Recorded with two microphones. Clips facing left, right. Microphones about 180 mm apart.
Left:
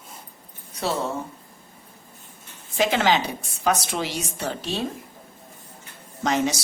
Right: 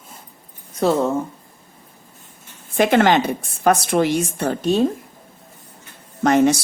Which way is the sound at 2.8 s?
55° right (ahead or behind).